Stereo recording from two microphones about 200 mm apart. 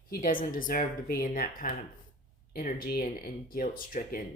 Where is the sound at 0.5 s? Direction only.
45° left (ahead or behind).